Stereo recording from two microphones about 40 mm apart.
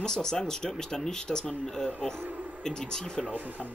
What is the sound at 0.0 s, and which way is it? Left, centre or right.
Speech, centre.